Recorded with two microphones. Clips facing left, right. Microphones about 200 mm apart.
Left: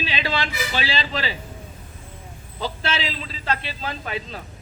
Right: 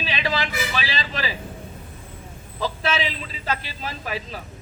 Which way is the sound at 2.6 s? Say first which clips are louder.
Right 2 dB; 30° left (ahead or behind).